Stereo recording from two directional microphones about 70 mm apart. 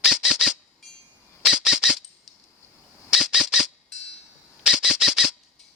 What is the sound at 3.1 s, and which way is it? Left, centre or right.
Squawk, centre.